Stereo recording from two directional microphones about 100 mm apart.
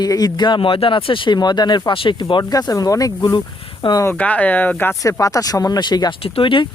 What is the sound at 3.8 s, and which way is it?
Speech, 60° left (ahead or behind).